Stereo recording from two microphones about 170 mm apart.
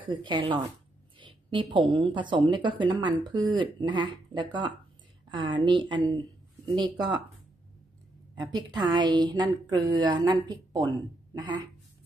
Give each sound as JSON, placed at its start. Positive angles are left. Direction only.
{"t": 0.0, "sound": "a woman's voice", "side_deg": -30}
{"t": 8.7, "sound": "a woman's voice", "side_deg": -25}